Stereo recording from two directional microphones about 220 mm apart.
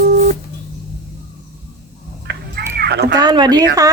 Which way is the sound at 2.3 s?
50° right (ahead or behind).